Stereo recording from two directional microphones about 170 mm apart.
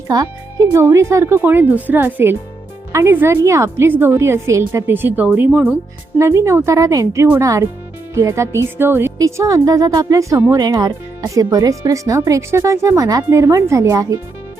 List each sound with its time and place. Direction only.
0.1 s speech: 20° right (ahead or behind)